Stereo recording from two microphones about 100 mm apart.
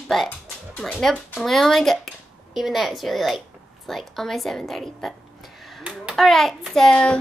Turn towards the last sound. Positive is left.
turn(degrees=10)  # may be behind; listen again after turning